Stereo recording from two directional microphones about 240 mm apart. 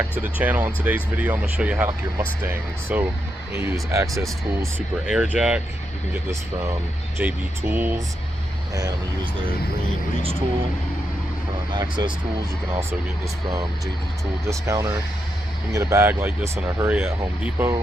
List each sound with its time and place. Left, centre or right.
0.2 s speech: centre
2.9 s speech: centre
7.2 s speech: centre
11.7 s speech: centre
14.4 s speech: centre